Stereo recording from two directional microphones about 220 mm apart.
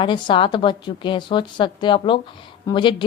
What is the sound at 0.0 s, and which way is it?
A woman's voice, 20° left (ahead or behind).